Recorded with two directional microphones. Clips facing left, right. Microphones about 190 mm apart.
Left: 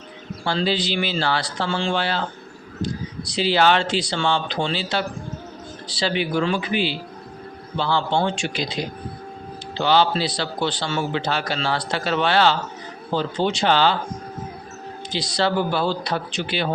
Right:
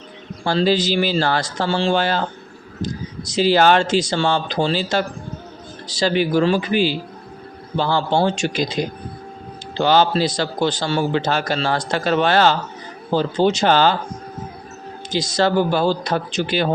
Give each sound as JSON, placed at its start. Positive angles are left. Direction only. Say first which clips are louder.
{"t": 0.4, "sound": "a man's voice", "louder": "right 5 dB", "side_deg": -45}
{"t": 15.1, "sound": "a man's voice", "louder": "right 4 dB", "side_deg": -45}